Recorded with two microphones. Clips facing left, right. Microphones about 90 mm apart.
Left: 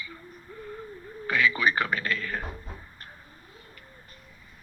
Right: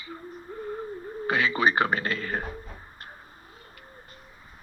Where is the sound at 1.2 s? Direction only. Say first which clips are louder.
Right 1 dB; 30° right (ahead or behind).